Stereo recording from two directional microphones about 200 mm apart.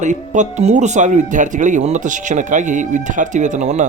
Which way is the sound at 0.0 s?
35° right (ahead or behind).